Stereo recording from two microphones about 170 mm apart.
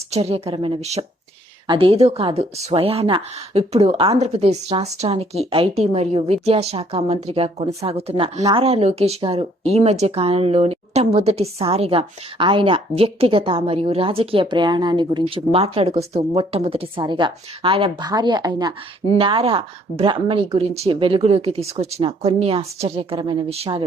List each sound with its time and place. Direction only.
0.1 s speech: 35° right (ahead or behind)